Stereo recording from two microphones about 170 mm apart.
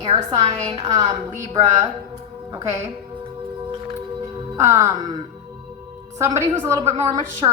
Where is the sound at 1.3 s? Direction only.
40° right (ahead or behind).